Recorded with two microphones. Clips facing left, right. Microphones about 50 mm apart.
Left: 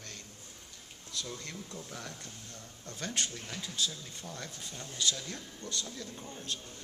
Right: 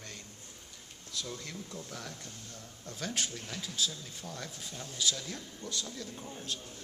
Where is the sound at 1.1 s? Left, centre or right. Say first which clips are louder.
Even; centre.